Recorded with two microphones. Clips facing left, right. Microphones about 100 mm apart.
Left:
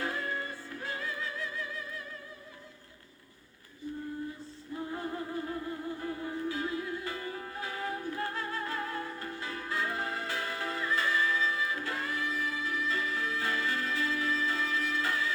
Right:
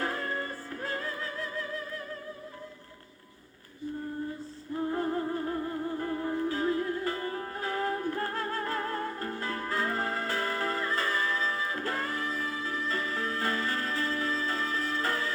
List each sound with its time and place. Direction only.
0.0 s music: 45° right (ahead or behind)
4.9 s music: 40° right (ahead or behind)